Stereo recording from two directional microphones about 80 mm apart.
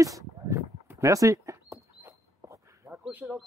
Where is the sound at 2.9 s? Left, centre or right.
Centre.